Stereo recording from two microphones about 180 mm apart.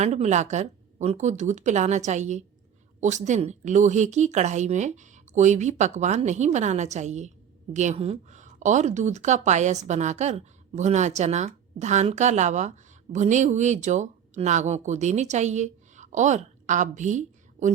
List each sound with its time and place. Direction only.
0.0 s a woman's voice: 40° right (ahead or behind)